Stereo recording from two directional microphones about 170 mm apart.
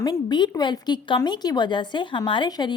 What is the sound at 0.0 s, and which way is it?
A woman's voice, 25° left (ahead or behind).